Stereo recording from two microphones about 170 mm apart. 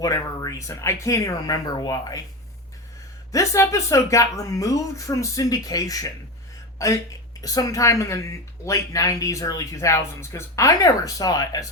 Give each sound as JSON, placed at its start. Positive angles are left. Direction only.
{"t": 0.0, "sound": "speech", "side_deg": 20}
{"t": 3.3, "sound": "speech", "side_deg": 20}